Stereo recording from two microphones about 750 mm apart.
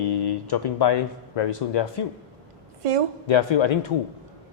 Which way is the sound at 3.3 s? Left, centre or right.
Left.